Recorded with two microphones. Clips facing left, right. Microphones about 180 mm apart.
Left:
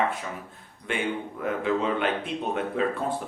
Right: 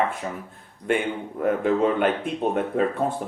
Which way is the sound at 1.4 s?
45° right (ahead or behind).